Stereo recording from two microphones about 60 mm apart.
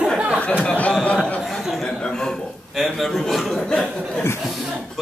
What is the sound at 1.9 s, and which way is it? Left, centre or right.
Speech, centre.